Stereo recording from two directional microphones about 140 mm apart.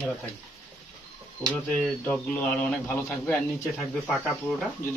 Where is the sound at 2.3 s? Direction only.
10° left (ahead or behind).